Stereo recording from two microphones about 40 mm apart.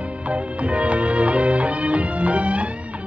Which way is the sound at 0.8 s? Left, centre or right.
Right.